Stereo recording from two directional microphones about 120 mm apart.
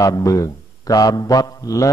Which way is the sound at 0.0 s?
30° left (ahead or behind).